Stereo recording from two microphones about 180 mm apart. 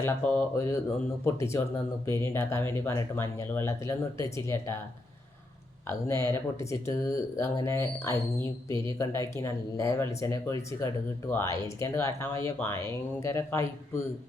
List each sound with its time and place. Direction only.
0.0 s speech: 10° left (ahead or behind)
6.1 s speech: 15° left (ahead or behind)